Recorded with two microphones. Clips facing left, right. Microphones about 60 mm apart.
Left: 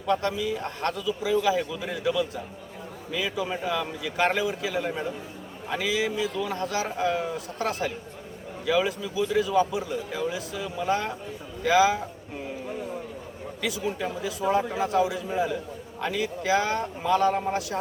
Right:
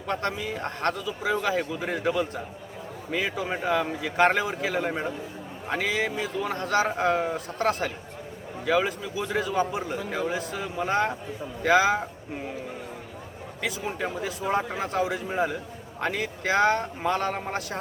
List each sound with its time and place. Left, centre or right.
0.1 s a man's voice: right
13.6 s speech: right